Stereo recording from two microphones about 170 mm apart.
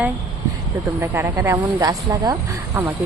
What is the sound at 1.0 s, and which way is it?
Speech, 15° right (ahead or behind).